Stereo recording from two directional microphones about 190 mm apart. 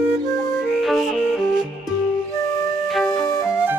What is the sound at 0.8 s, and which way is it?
Music, centre (ahead or behind).